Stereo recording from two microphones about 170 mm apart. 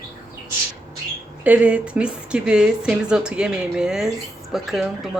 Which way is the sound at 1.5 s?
10° right (ahead or behind).